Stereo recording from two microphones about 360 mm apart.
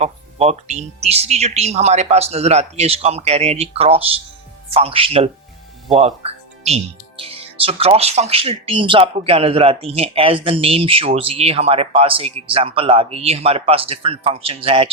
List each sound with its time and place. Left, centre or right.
0.0 s speech: centre